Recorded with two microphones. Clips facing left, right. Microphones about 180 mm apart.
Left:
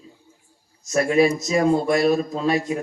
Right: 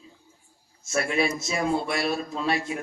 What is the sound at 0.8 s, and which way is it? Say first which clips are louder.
Speech: left 8 dB; 40° left (ahead or behind).